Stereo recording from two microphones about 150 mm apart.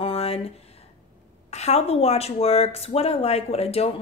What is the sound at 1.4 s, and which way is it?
A woman's voice, 45° left (ahead or behind).